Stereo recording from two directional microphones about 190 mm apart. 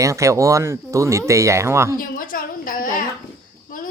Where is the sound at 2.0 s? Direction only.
45° left (ahead or behind).